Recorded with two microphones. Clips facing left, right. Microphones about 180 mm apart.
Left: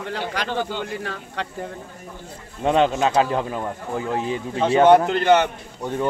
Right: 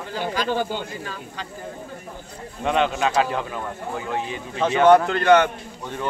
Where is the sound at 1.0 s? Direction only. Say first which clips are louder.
Left 4 dB; 70° left (ahead or behind).